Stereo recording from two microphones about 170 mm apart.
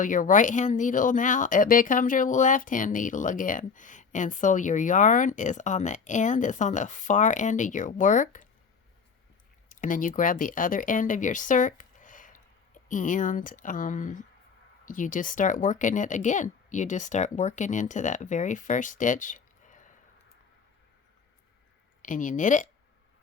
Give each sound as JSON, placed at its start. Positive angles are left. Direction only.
{"t": 0.0, "sound": "speech", "side_deg": 50}
{"t": 9.6, "sound": "speech", "side_deg": 50}
{"t": 22.0, "sound": "speech", "side_deg": 50}